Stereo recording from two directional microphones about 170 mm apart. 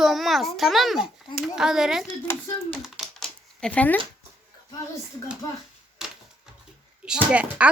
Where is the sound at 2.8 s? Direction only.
Centre (ahead or behind).